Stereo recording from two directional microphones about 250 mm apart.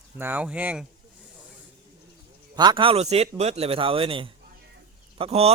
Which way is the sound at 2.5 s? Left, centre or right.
Centre.